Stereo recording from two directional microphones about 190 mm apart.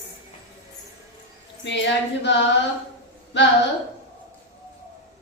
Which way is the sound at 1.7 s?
70° left (ahead or behind).